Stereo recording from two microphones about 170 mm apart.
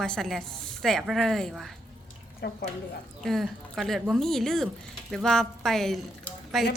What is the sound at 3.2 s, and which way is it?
A woman's voice, centre (ahead or behind).